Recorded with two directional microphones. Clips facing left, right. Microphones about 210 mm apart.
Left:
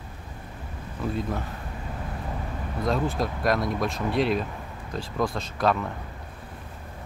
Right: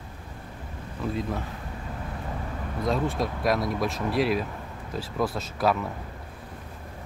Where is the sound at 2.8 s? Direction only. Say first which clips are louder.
Even; centre (ahead or behind).